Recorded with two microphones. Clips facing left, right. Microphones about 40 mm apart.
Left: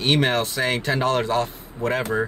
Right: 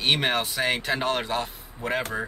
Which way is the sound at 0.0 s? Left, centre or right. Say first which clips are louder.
Left 3 dB; centre.